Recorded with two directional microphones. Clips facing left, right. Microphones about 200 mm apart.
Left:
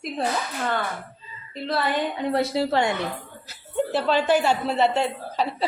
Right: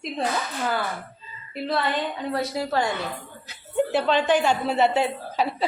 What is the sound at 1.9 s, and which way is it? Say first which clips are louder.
Speech: left 3 dB; 25° left (ahead or behind).